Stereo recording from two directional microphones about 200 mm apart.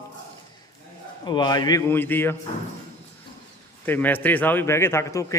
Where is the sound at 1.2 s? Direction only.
20° left (ahead or behind).